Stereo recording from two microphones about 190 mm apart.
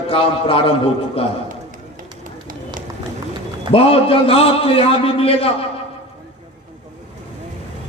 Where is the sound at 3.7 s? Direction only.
30° left (ahead or behind).